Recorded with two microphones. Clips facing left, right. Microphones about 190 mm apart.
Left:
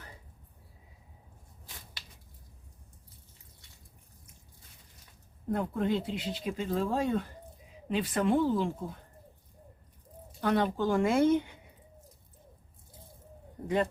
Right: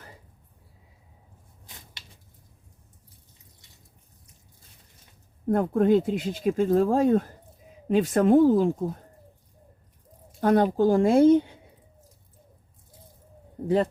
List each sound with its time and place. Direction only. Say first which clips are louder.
5.5 s speech: right 9 dB; 50° right (ahead or behind)
10.4 s speech: right 8 dB; 45° right (ahead or behind)